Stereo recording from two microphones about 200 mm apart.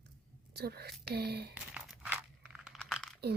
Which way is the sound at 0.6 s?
50° right (ahead or behind).